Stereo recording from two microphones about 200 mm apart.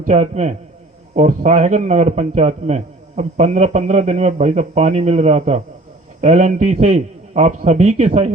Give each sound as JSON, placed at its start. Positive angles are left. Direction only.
{"t": 0.0, "sound": "a man's voice", "side_deg": -35}